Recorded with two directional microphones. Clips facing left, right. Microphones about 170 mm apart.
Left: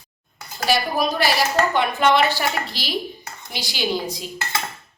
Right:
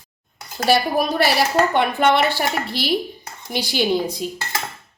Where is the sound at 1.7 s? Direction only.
60° right (ahead or behind).